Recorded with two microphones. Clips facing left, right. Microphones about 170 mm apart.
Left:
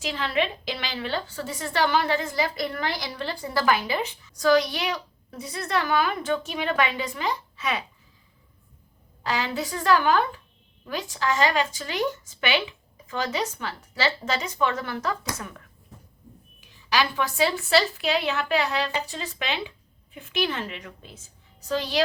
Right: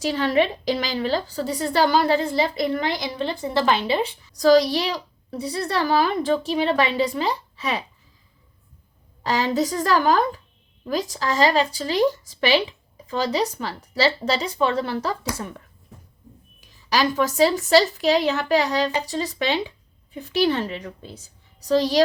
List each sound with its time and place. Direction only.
0.0 s a woman's voice: 40° right (ahead or behind)
9.2 s a woman's voice: 40° right (ahead or behind)